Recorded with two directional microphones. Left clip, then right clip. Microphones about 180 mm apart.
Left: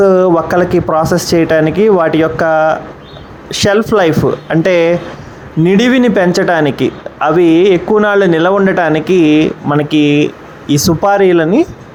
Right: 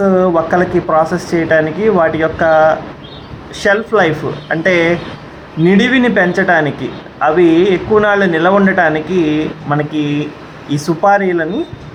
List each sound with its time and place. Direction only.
0.0 s speech: 40° left (ahead or behind)